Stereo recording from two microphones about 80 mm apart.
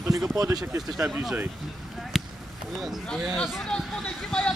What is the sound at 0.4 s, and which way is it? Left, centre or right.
Speech, right.